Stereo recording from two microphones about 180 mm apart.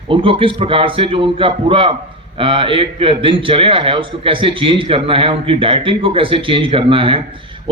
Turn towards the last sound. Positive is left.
turn(degrees=-30)  # may be behind; listen again after turning